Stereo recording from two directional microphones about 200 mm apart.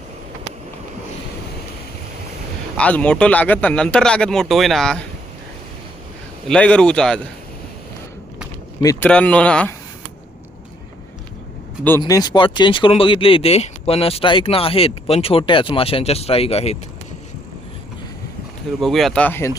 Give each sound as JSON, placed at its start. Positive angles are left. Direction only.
{"t": 2.7, "sound": "speech", "side_deg": 5}
{"t": 6.5, "sound": "speech", "side_deg": 5}
{"t": 8.8, "sound": "speech", "side_deg": 15}
{"t": 9.0, "sound": "speech", "side_deg": 5}
{"t": 12.0, "sound": "speech", "side_deg": 20}
{"t": 18.8, "sound": "speech", "side_deg": 0}